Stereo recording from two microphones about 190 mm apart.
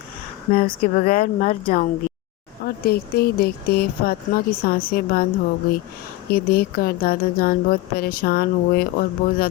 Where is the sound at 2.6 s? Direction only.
55° left (ahead or behind).